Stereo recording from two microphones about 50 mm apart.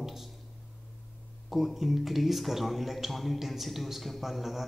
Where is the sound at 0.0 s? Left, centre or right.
Centre.